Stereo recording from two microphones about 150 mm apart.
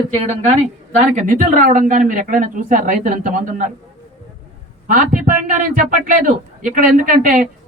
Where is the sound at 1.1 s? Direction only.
60° right (ahead or behind).